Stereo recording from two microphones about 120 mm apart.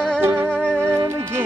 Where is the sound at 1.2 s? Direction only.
20° right (ahead or behind).